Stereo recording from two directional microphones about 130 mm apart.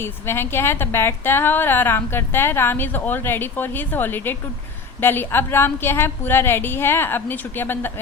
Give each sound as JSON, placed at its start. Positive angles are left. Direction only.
{"t": 0.0, "sound": "a woman's voice", "side_deg": 20}